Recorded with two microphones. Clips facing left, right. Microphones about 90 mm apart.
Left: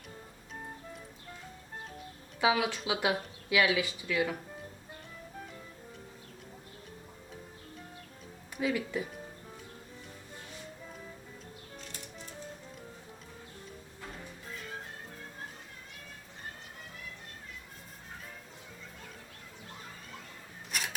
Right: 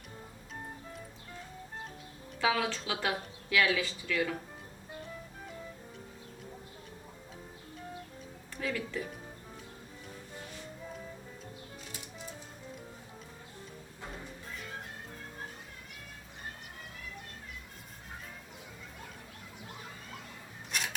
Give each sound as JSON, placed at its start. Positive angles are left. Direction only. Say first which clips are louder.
{"t": 2.4, "sound": "speech", "louder": "left 2 dB", "side_deg": 15}
{"t": 8.5, "sound": "speech", "louder": "left 4 dB", "side_deg": 15}
{"t": 20.7, "sound": "a sound", "louder": "even", "side_deg": 5}